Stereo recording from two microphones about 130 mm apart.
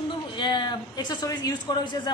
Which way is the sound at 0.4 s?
35° left (ahead or behind).